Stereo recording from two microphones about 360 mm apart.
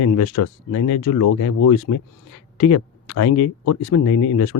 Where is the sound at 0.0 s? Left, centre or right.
Left.